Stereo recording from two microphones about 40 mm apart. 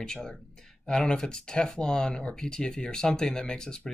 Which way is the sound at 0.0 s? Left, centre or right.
Centre.